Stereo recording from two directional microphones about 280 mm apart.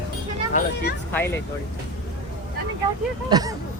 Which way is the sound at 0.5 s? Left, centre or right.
Left.